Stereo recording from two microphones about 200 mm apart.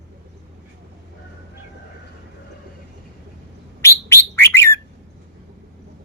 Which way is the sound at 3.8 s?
15° left (ahead or behind).